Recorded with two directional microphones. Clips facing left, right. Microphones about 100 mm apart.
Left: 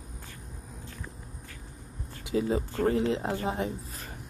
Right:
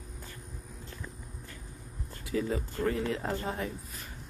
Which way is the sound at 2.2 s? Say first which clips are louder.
Left 4 dB; 25° left (ahead or behind).